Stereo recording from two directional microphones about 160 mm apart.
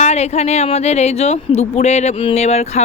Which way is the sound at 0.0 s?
45° left (ahead or behind).